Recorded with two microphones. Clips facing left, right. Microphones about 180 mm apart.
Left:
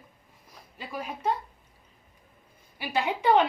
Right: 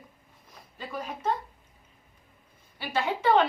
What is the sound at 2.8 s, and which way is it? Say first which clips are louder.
Speech: left 1 dB; 15° left (ahead or behind).